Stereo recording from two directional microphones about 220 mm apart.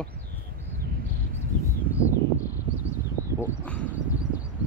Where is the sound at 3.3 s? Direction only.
10° left (ahead or behind).